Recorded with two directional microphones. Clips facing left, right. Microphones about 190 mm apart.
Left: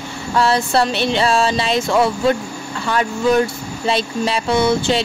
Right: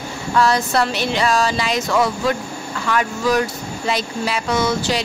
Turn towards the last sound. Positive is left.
turn(degrees=30)  # may be behind; listen again after turning